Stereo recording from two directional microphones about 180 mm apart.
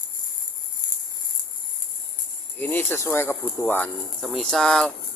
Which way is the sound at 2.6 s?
10° left (ahead or behind).